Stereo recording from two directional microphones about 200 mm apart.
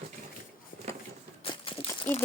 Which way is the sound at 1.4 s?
25° left (ahead or behind).